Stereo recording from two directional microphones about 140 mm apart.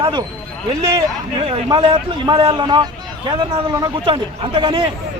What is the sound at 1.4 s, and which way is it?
A man's voice, 40° right (ahead or behind).